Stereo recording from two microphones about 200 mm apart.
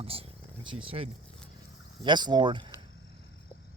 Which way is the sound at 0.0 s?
30° right (ahead or behind).